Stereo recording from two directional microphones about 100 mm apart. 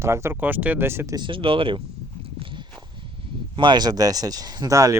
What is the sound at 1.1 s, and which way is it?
Speech, 55° right (ahead or behind).